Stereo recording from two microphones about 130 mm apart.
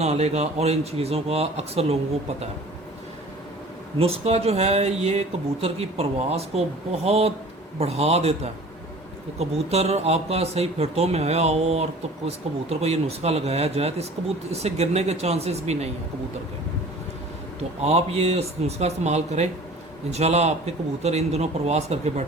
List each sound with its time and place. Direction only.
0.0 s speech: 55° right (ahead or behind)
3.9 s speech: 50° right (ahead or behind)
9.4 s a man's voice: 55° right (ahead or behind)
17.6 s a man's voice: 55° right (ahead or behind)